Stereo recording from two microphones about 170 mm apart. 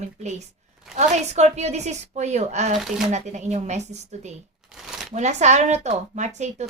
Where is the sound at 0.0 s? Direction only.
40° right (ahead or behind).